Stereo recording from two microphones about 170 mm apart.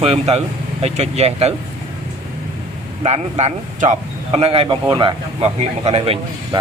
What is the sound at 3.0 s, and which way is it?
Speech, 40° right (ahead or behind).